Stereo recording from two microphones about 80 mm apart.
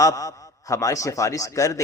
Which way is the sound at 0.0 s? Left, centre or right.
Left.